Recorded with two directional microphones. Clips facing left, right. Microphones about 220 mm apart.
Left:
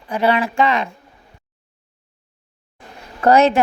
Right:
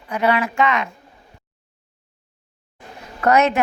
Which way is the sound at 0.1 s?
30° left (ahead or behind).